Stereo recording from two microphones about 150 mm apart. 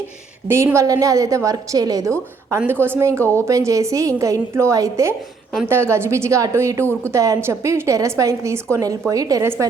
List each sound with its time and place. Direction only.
0.4 s a woman's voice: 20° right (ahead or behind)